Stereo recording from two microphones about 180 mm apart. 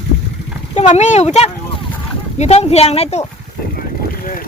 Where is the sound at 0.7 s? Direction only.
40° left (ahead or behind).